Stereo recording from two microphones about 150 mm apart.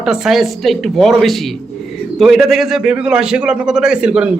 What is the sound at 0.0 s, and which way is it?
A man's voice, 5° right (ahead or behind).